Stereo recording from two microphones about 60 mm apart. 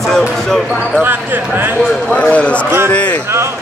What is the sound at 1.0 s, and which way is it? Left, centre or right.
Speech, right.